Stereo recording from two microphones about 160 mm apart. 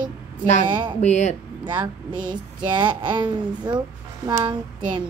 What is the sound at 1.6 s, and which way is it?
Speech, 25° right (ahead or behind).